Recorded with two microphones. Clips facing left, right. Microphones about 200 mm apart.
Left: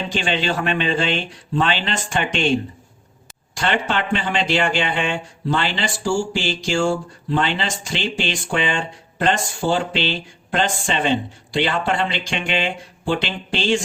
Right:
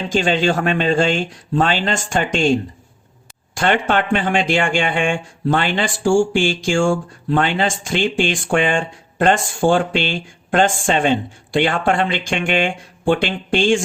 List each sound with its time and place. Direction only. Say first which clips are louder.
0.1 s speech: right 8 dB; 45° right (ahead or behind)